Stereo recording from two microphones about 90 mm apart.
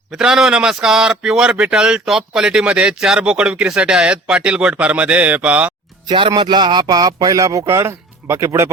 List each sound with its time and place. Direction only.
0.1 s a man's voice: 5° right (ahead or behind)
6.1 s a man's voice: 60° right (ahead or behind); by 8.7 s 30° right (ahead or behind)